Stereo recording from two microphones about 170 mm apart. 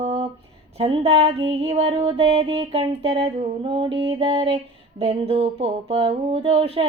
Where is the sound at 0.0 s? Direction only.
40° right (ahead or behind).